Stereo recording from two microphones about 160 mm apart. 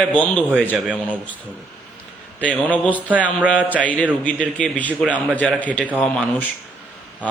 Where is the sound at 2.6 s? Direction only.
10° left (ahead or behind).